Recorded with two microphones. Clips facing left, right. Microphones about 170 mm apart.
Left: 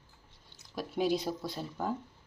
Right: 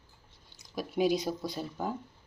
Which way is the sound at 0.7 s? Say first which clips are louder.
Right 2 dB; centre (ahead or behind).